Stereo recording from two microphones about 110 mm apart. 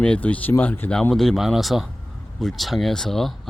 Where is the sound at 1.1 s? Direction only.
Centre (ahead or behind).